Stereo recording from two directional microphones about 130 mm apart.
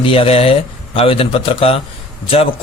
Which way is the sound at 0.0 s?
45° left (ahead or behind).